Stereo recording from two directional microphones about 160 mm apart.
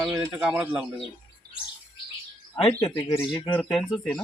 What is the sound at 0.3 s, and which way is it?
Speech, 10° right (ahead or behind).